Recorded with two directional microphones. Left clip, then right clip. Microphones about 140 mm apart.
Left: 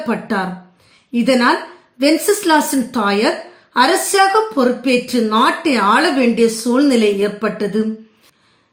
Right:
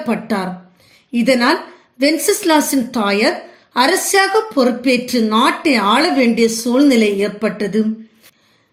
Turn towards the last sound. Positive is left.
turn(degrees=-30)  # may be behind; listen again after turning